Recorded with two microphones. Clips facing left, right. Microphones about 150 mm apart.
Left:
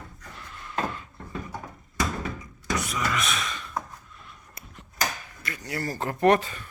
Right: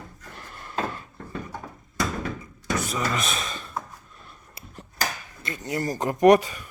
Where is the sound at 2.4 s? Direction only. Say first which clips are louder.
Right 2 dB; 30° right (ahead or behind).